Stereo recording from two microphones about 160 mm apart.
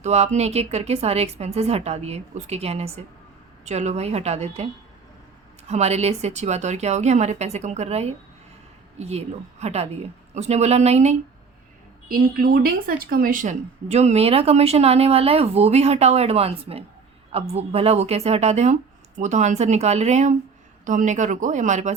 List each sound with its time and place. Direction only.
0.0 s speech: 45° right (ahead or behind)
5.6 s speech: 40° right (ahead or behind)
12.1 s speech: 65° right (ahead or behind); by 21.9 s 50° right (ahead or behind)